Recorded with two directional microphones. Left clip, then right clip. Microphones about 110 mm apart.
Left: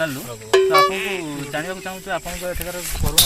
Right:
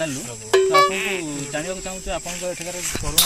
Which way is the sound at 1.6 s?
30° right (ahead or behind).